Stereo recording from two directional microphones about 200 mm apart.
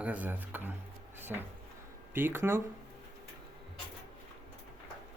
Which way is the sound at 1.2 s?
10° right (ahead or behind).